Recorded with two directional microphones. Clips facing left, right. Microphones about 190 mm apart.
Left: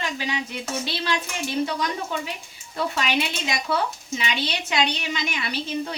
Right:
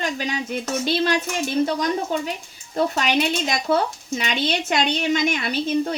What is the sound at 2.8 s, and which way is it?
Speech, 45° right (ahead or behind).